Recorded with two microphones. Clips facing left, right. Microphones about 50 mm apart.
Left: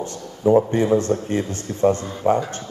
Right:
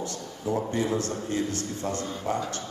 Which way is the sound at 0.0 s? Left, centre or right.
Left.